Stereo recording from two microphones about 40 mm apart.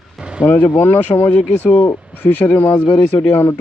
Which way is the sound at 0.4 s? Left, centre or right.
Left.